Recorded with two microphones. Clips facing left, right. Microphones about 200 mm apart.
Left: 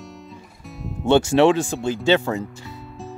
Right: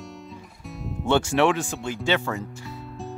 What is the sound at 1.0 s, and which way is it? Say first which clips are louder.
Speech: left 5 dB; 25° left (ahead or behind).